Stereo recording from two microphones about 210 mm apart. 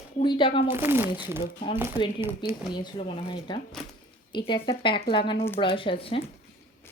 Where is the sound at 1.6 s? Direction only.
25° left (ahead or behind).